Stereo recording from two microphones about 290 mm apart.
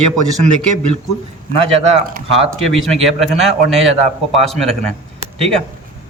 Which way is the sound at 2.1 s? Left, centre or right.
Right.